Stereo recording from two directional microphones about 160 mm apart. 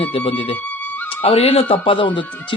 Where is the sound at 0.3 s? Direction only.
35° left (ahead or behind).